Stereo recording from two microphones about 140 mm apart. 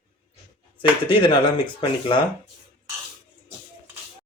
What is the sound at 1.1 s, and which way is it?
Speech, 35° left (ahead or behind).